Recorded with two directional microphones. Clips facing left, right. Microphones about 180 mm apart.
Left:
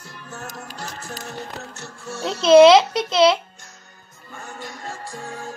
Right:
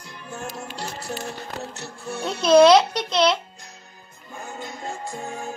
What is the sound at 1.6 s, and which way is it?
Music, 15° right (ahead or behind).